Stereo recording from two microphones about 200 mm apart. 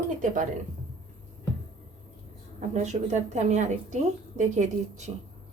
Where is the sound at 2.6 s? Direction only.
35° right (ahead or behind).